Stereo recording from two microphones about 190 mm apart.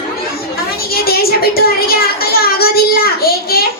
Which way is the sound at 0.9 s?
55° left (ahead or behind).